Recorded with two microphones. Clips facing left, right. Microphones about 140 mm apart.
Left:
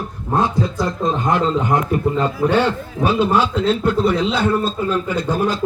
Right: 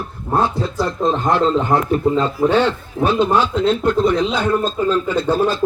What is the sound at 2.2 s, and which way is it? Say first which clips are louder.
A man's voice: right 1 dB; 10° left (ahead or behind).